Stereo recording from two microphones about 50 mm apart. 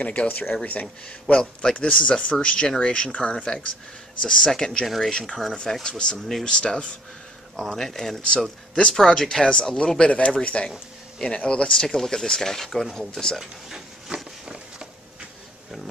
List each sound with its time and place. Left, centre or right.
0.0 s speech: left
1.3 s a man's voice: centre
4.8 s speech: centre
5.1 s speech: centre
6.4 s speech: centre
7.5 s speech: centre
7.8 s speech: centre
13.4 s speech: centre
14.1 s a sound: centre